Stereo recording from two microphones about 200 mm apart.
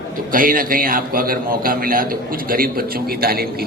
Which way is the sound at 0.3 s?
45° right (ahead or behind).